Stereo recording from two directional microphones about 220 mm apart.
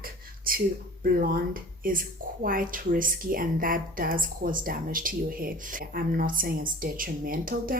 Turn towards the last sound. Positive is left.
turn(degrees=-40)  # may be behind; listen again after turning